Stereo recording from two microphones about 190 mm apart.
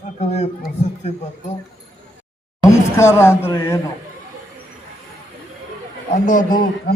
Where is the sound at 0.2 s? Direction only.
35° left (ahead or behind).